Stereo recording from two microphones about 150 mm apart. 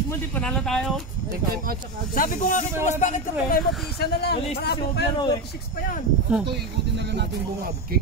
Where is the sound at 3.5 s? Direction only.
90° left.